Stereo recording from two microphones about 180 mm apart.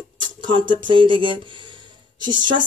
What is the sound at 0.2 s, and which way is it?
Speech, 25° right (ahead or behind).